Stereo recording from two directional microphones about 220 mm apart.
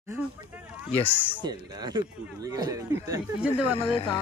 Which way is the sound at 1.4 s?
20° right (ahead or behind).